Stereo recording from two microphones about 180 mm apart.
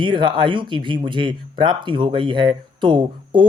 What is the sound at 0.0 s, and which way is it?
Speech, 25° right (ahead or behind).